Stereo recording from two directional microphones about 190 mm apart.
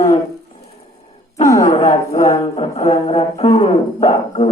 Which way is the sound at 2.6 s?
35° left (ahead or behind).